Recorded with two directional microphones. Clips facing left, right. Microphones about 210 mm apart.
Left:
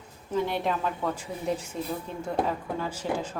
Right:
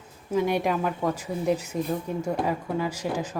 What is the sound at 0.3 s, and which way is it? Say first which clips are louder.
Speech: right 4 dB; 10° right (ahead or behind).